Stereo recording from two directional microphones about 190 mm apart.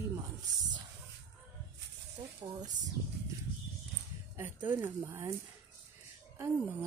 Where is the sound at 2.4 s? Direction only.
20° right (ahead or behind).